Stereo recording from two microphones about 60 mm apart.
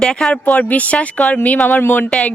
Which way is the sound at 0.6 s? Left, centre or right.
Left.